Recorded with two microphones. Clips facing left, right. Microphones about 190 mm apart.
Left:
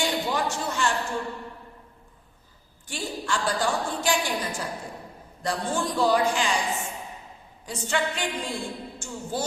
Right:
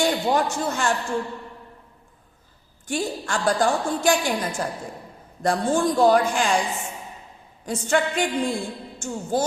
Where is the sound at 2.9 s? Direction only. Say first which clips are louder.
Right 4 dB; 50° right (ahead or behind).